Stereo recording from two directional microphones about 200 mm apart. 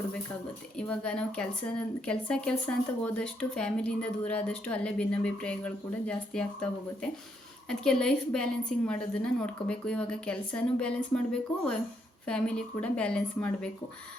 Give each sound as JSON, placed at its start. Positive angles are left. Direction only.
{"t": 0.8, "sound": "speech", "side_deg": 5}
{"t": 7.7, "sound": "speech", "side_deg": 5}